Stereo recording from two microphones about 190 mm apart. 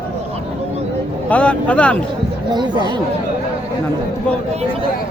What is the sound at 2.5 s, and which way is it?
Speech, 25° right (ahead or behind).